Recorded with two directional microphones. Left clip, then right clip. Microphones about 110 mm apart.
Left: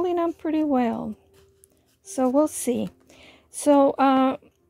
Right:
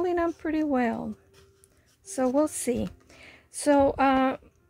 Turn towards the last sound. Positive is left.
turn(degrees=35)  # may be behind; listen again after turning